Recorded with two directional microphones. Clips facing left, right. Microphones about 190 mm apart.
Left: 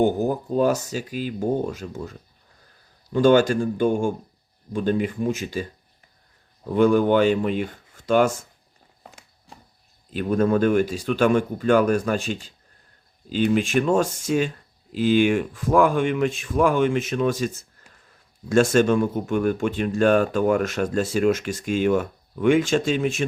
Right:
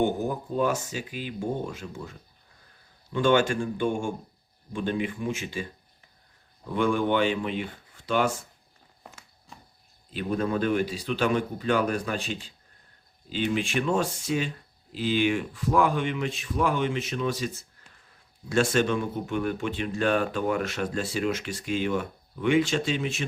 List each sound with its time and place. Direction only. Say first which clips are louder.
0.0 s speech: left 5 dB; 40° left (ahead or behind)
6.7 s speech: left 7 dB; 40° left (ahead or behind)
10.1 s speech: left 7 dB; 45° left (ahead or behind)